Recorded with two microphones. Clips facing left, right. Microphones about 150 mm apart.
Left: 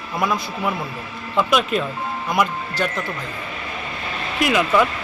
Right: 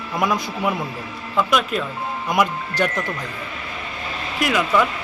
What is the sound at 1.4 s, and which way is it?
Speech, centre (ahead or behind).